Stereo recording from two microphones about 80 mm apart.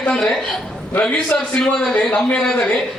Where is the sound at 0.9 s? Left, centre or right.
Centre.